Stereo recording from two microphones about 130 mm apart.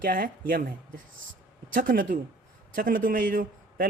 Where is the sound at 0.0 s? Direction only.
90° right.